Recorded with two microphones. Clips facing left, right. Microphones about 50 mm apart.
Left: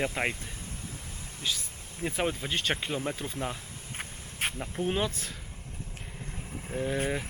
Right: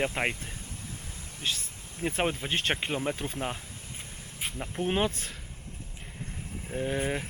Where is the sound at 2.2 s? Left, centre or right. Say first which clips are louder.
Right 1 dB; centre.